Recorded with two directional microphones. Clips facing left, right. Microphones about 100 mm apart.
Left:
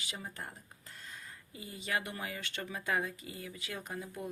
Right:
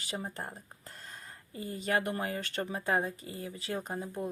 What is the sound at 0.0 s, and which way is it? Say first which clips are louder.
Speech: right 5 dB; 40° right (ahead or behind).